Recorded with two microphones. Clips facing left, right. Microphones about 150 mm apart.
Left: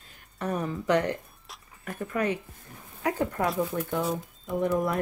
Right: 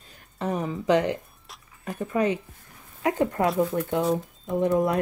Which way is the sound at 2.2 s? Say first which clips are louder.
Right 4 dB; 25° right (ahead or behind).